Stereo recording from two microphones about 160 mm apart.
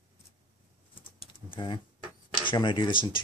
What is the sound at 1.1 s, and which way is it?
Typing, 30° left (ahead or behind).